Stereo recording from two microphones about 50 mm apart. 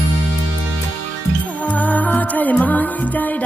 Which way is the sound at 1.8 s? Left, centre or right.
Left.